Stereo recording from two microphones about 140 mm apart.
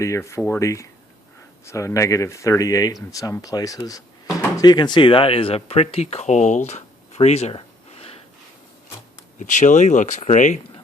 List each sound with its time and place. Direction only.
0.0 s speech: 20° left (ahead or behind); by 8.1 s 45° left (ahead or behind)
9.4 s speech: 60° left (ahead or behind)